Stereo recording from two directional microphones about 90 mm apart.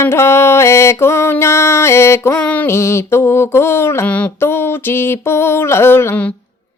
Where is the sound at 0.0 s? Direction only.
30° left (ahead or behind).